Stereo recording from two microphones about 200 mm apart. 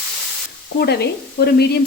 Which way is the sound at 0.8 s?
55° left (ahead or behind).